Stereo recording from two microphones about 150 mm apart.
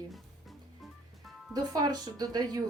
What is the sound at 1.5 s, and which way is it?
Speech, 25° right (ahead or behind).